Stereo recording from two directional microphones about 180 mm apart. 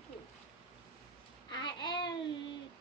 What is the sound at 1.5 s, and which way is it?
Speech, 25° left (ahead or behind).